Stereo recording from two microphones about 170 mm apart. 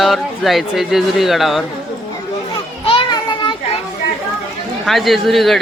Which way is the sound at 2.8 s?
30° left (ahead or behind).